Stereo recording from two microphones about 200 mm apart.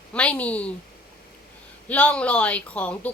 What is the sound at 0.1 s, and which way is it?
Speech, 5° left (ahead or behind).